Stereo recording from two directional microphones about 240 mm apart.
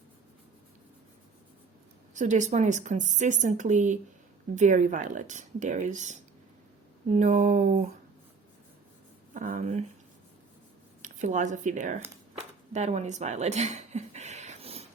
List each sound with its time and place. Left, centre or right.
2.1 s speech: right
9.3 s speech: right
11.0 s speech: right
12.4 s a sound: right